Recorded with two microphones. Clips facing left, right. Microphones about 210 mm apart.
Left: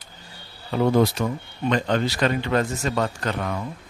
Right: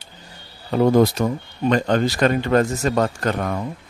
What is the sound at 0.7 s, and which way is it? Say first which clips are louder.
Speech: right 4 dB; 40° right (ahead or behind).